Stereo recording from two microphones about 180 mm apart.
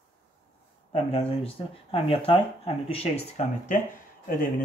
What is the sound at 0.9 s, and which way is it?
Speech, 30° left (ahead or behind).